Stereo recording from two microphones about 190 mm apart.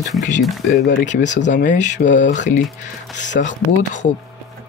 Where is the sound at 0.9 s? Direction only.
40° left (ahead or behind).